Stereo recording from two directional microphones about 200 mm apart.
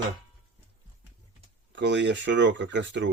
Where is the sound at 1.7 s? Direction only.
60° right (ahead or behind).